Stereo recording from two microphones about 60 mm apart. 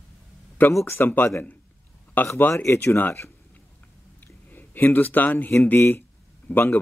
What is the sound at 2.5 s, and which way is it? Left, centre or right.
Speech, left.